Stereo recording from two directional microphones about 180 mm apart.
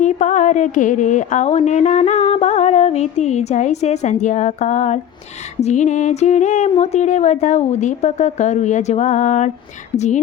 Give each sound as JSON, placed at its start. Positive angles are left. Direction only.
{"t": 0.0, "sound": "speech", "side_deg": 40}